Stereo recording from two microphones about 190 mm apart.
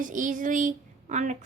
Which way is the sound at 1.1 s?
40° right (ahead or behind).